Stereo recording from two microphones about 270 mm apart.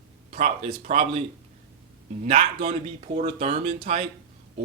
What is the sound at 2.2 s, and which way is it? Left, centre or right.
Speech, right.